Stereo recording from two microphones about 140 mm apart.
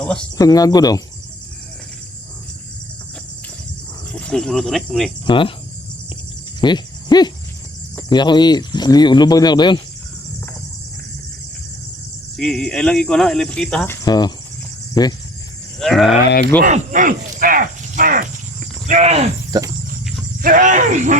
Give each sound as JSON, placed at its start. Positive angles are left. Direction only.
{"t": 0.0, "sound": "a sound", "side_deg": 5}
{"t": 0.3, "sound": "speech", "side_deg": 25}
{"t": 4.1, "sound": "speech", "side_deg": 5}
{"t": 5.2, "sound": "speech", "side_deg": 35}
{"t": 6.6, "sound": "a sound", "side_deg": 30}
{"t": 8.1, "sound": "speech", "side_deg": 30}
{"t": 12.4, "sound": "speech", "side_deg": 5}
{"t": 13.8, "sound": "speech", "side_deg": 20}
{"t": 15.8, "sound": "speech", "side_deg": 0}
{"t": 16.6, "sound": "a sound", "side_deg": -65}
{"t": 19.5, "sound": "speech", "side_deg": -30}
{"t": 20.4, "sound": "speech", "side_deg": -70}